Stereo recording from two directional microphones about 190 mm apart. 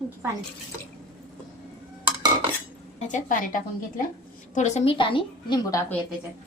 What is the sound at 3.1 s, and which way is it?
A woman's voice, 45° left (ahead or behind).